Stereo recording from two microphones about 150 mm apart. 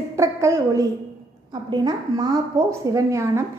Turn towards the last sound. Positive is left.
turn(degrees=-20)  # may be behind; listen again after turning